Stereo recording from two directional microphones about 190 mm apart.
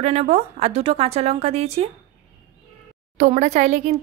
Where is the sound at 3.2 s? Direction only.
35° right (ahead or behind).